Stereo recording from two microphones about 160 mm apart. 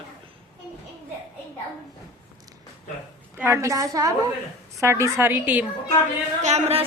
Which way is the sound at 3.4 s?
15° right (ahead or behind).